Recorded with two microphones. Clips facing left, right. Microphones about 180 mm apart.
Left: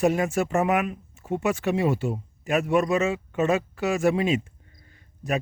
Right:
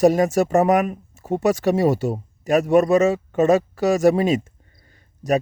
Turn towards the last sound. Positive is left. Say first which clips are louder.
# right 7 dB
turn(degrees=-40)  # may be behind; listen again after turning